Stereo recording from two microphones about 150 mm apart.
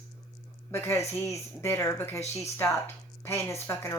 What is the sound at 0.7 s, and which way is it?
A woman's voice, 15° left (ahead or behind).